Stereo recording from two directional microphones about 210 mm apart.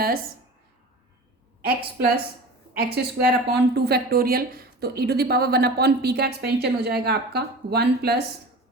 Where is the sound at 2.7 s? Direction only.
50° right (ahead or behind).